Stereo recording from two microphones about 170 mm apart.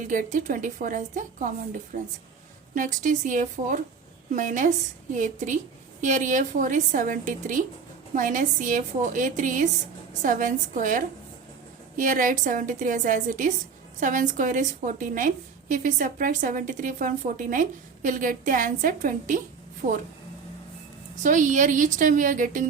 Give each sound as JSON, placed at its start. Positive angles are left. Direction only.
{"t": 0.0, "sound": "a woman's voice", "side_deg": -50}
{"t": 2.7, "sound": "a woman's voice", "side_deg": -50}
{"t": 21.2, "sound": "a woman's voice", "side_deg": -50}